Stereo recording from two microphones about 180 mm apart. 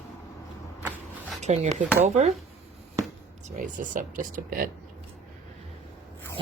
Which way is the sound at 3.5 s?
45° right (ahead or behind).